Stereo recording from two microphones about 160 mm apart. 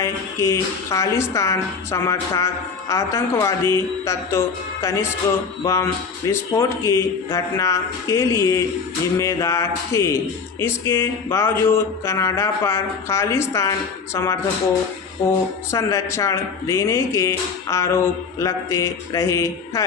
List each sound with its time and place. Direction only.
0.0 s speech: 15° left (ahead or behind)
15.7 s speech: 20° left (ahead or behind)